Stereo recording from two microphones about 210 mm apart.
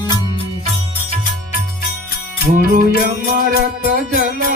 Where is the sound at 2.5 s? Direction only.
45° right (ahead or behind).